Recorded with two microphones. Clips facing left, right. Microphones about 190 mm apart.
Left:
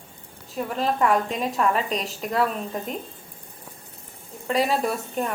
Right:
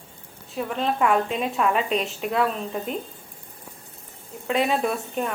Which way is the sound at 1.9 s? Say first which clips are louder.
Right 3 dB; 35° left (ahead or behind).